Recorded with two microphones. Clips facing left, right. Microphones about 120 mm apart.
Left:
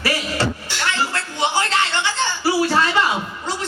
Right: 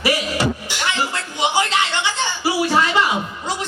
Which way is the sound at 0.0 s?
15° right (ahead or behind).